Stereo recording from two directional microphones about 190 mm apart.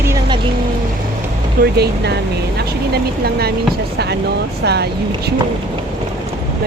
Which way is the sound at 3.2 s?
55° right (ahead or behind).